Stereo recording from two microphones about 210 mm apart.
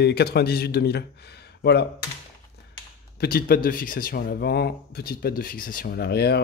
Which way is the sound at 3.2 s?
45° left (ahead or behind).